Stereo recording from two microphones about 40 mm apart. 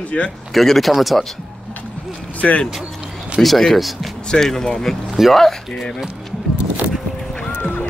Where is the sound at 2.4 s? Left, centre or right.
Left.